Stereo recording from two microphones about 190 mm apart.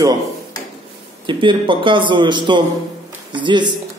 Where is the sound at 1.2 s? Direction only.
25° right (ahead or behind).